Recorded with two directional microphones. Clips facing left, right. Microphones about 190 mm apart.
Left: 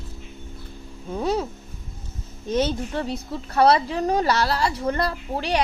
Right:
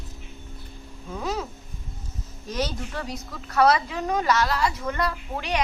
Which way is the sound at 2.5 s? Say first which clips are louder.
Left 6 dB; 25° left (ahead or behind).